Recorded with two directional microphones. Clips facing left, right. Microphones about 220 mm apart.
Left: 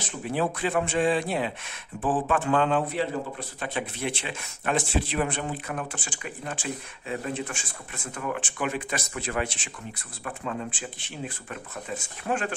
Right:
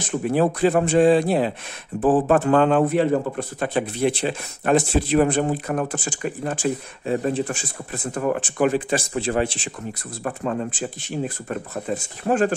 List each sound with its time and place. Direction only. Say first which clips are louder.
0.0 s a man's voice: right 8 dB; 45° right (ahead or behind)
10.2 s a man's voice: right 7 dB; 45° right (ahead or behind)